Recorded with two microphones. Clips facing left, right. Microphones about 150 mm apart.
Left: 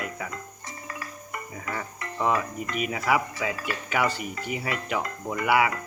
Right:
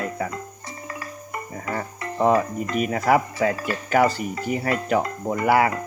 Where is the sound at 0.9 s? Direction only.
25° right (ahead or behind).